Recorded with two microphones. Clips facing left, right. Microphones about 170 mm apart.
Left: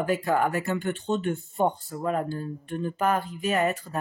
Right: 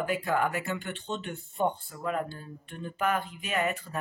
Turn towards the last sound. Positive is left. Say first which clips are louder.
# left 5 dB
turn(degrees=40)  # may be behind; listen again after turning